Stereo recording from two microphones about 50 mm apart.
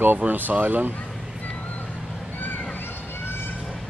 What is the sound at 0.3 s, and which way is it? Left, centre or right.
Speech, right.